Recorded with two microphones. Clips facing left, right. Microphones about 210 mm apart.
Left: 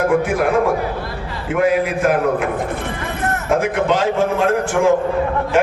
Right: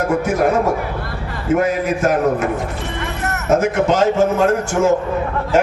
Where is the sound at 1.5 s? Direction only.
45° right (ahead or behind).